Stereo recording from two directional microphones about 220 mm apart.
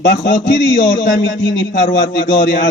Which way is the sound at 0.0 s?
45° left (ahead or behind).